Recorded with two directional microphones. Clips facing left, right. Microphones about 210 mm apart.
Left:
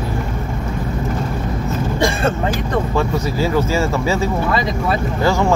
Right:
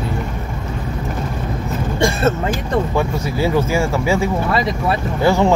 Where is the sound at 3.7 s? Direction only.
15° right (ahead or behind).